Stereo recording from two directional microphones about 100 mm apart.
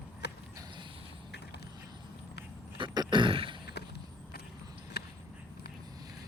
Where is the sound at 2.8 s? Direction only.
55° right (ahead or behind).